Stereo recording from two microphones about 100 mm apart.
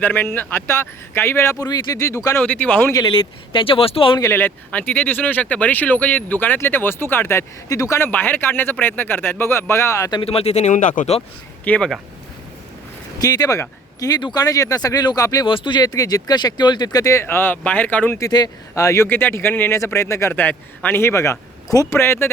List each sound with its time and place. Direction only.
0.0 s speech: 20° left (ahead or behind)
1.5 s speech: 40° left (ahead or behind)
2.4 s speech: 15° left (ahead or behind)
3.1 s speech: 60° left (ahead or behind)
4.3 s speech: 20° left (ahead or behind)
10.2 s speech: 85° left
11.6 s speech: 15° left (ahead or behind)
13.1 s speech: 40° left (ahead or behind)
15.4 s speech: 55° left (ahead or behind); by 18.2 s 15° left (ahead or behind)
18.2 s speech: 40° left (ahead or behind)
19.0 s speech: 20° left (ahead or behind)